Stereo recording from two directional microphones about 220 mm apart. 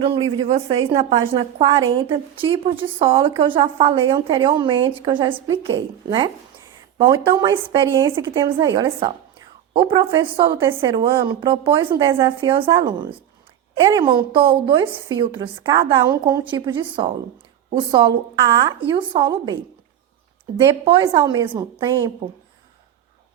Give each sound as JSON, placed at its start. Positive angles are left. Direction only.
{"t": 0.0, "sound": "a woman's voice", "side_deg": -25}
{"t": 20.8, "sound": "a woman's voice", "side_deg": -20}